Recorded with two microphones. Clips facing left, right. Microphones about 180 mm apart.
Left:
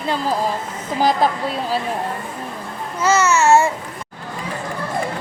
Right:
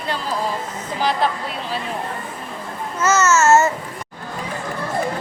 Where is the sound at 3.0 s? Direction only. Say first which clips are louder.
Left 1 dB; 10° left (ahead or behind).